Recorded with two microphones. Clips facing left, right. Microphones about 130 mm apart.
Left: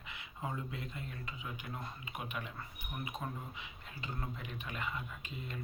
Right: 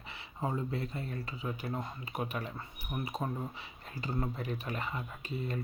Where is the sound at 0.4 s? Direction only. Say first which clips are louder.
Right 7 dB; 35° right (ahead or behind).